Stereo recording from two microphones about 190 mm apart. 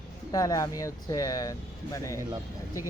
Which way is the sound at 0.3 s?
20° left (ahead or behind).